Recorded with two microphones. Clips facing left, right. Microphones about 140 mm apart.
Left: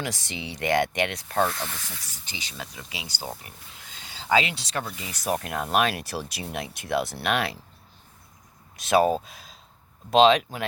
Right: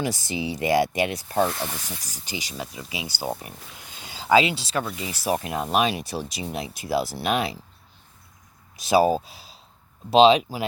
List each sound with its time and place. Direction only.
0.1 s speech: 10° right (ahead or behind)
1.3 s speech: 25° right (ahead or behind)
2.5 s speech: 5° right (ahead or behind)
8.7 s speech: 5° right (ahead or behind)